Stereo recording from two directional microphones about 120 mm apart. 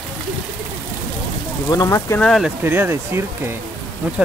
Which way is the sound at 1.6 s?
30° left (ahead or behind).